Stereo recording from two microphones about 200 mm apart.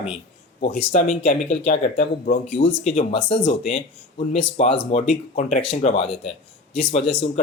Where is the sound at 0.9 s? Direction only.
35° left (ahead or behind).